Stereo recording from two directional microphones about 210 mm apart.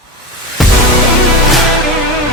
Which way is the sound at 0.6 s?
Centre (ahead or behind).